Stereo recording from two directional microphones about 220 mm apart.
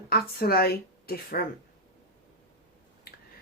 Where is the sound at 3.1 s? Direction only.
45° left (ahead or behind).